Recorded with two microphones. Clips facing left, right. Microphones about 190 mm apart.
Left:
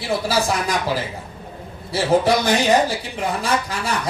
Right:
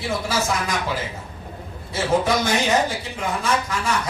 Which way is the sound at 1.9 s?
35° left (ahead or behind).